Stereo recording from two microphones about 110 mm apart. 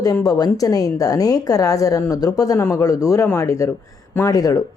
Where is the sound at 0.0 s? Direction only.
35° left (ahead or behind).